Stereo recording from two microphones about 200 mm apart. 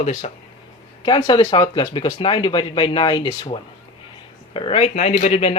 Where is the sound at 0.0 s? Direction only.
35° left (ahead or behind).